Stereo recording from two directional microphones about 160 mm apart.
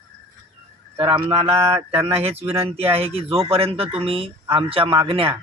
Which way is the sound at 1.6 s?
15° right (ahead or behind).